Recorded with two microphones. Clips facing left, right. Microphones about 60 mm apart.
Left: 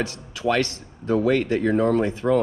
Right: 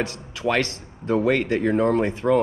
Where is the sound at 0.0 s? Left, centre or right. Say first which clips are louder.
Even; right.